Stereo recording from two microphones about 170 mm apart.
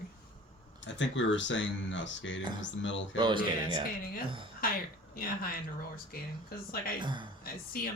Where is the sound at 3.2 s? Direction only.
25° right (ahead or behind).